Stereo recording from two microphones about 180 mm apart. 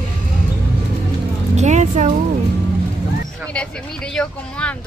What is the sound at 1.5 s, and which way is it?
Speech, 40° right (ahead or behind).